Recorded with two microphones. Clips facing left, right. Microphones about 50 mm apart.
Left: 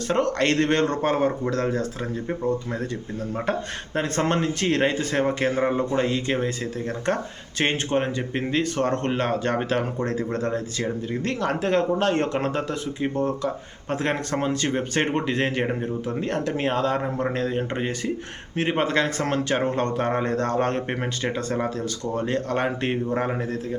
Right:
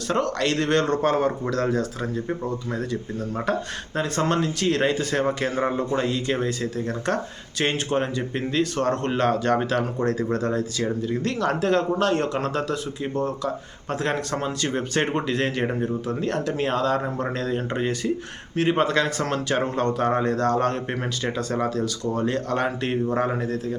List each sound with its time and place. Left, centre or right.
0.1 s speech: left
2.7 s speech: left